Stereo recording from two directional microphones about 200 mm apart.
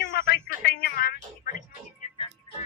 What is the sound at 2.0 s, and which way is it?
Music, 35° left (ahead or behind).